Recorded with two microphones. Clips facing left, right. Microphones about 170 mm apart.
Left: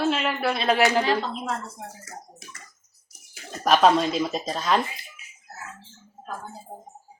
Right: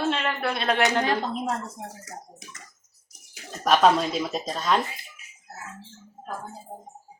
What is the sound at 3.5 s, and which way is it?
Speech, centre (ahead or behind).